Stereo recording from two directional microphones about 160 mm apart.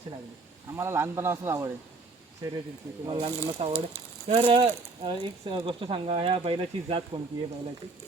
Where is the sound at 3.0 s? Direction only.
30° right (ahead or behind).